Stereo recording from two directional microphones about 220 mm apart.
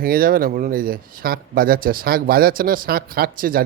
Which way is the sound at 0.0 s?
40° right (ahead or behind).